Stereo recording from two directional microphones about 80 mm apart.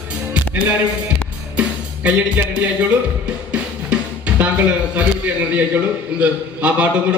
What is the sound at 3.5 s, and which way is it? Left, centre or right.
Music, centre.